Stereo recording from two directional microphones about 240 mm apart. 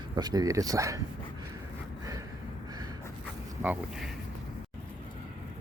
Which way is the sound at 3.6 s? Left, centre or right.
Centre.